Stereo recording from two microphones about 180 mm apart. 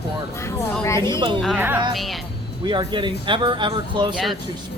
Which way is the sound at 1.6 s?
10° right (ahead or behind).